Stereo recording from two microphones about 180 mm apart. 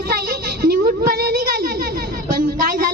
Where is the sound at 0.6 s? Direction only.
55° right (ahead or behind).